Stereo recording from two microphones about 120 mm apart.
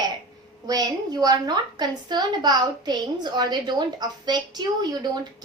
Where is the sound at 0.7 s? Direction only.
30° right (ahead or behind).